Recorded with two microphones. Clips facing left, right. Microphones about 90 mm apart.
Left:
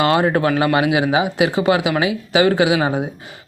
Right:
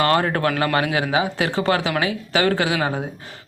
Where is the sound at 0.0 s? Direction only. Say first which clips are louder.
Left 3 dB; 15° left (ahead or behind).